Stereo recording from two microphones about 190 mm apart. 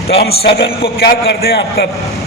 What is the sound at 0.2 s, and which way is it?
A man's voice, 55° left (ahead or behind).